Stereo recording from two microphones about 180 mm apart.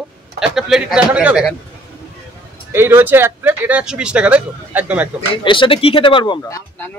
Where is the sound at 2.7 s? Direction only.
15° right (ahead or behind).